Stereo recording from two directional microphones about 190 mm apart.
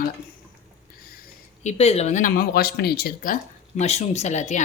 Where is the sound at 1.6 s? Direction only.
35° left (ahead or behind); by 3.3 s 50° left (ahead or behind).